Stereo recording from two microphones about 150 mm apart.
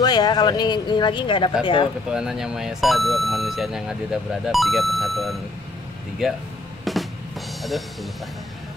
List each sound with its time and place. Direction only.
0.0 s speech: 25° left (ahead or behind)
2.0 s speech: 5° right (ahead or behind)
6.8 s music: centre (ahead or behind)